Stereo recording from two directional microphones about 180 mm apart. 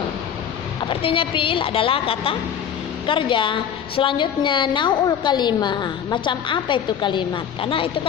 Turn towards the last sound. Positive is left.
turn(degrees=30)  # may be behind; listen again after turning